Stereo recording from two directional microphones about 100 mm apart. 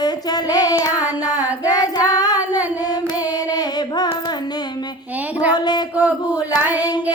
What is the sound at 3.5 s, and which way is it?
Child singing, 45° left (ahead or behind).